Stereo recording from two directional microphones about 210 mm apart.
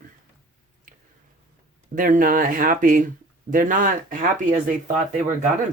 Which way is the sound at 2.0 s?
40° right (ahead or behind).